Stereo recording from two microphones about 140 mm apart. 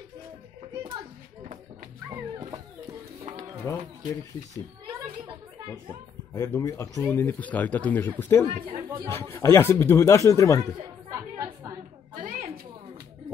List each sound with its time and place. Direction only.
3.7 s speech: 20° left (ahead or behind)
6.3 s speech: 20° left (ahead or behind)
10.6 s chatter: 20° right (ahead or behind)
12.2 s a sound: 65° right (ahead or behind)